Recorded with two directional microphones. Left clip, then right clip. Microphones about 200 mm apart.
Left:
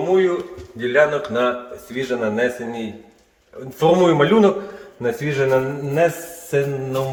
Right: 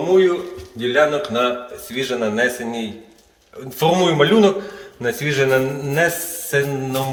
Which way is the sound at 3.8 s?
35° left (ahead or behind).